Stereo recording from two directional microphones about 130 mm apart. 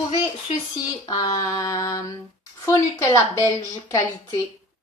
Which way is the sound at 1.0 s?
30° left (ahead or behind).